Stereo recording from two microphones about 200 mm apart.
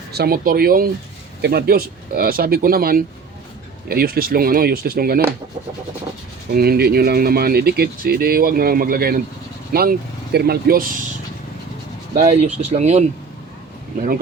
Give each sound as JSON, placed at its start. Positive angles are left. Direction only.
{"t": 0.1, "sound": "speech", "side_deg": -50}
{"t": 6.5, "sound": "speech", "side_deg": -50}
{"t": 12.1, "sound": "speech", "side_deg": -35}